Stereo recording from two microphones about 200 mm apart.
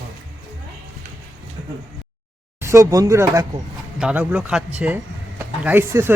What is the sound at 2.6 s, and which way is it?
Speech, 15° right (ahead or behind).